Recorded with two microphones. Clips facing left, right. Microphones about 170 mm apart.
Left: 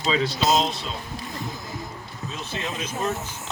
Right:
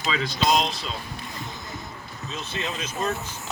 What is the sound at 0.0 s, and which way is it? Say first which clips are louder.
Speech: left 4 dB; 35° left (ahead or behind).